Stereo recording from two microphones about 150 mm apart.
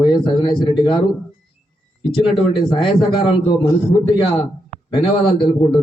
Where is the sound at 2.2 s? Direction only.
35° left (ahead or behind).